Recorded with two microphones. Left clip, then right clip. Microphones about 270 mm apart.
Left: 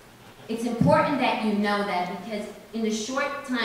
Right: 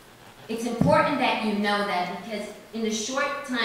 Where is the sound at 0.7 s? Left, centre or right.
Centre.